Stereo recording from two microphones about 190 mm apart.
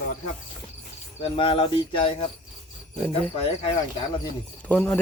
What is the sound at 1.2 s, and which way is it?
Speech, 30° left (ahead or behind).